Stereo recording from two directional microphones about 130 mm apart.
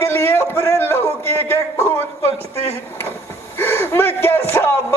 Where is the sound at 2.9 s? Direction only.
15° left (ahead or behind).